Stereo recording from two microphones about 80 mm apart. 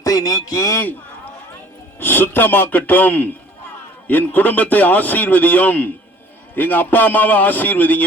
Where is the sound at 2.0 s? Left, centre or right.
Left.